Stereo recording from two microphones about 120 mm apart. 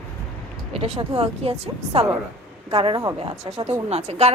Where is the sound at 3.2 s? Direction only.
60° right (ahead or behind).